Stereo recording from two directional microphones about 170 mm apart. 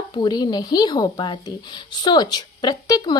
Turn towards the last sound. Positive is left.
turn(degrees=25)  # may be behind; listen again after turning